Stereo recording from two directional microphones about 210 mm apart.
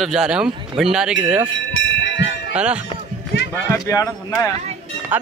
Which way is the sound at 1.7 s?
60° left (ahead or behind).